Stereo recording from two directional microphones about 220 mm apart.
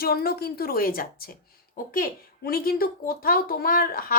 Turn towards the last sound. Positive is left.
turn(degrees=40)  # may be behind; listen again after turning